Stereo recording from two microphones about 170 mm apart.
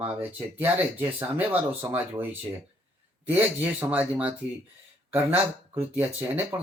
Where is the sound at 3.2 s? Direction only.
10° right (ahead or behind).